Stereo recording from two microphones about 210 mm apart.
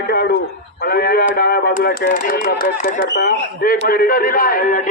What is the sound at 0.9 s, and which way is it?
Speech, 45° left (ahead or behind).